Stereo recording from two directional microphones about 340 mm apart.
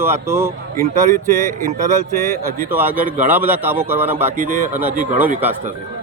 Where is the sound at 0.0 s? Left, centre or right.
Centre.